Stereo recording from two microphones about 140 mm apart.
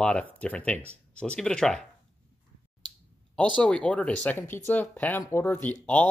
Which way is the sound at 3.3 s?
10° left (ahead or behind).